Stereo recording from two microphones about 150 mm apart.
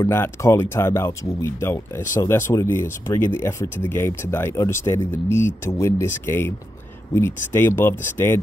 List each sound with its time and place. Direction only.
0.0 s speech: 15° left (ahead or behind)